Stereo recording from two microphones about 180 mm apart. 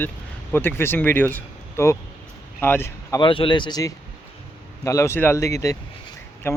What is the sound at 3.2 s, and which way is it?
Speech, 30° left (ahead or behind).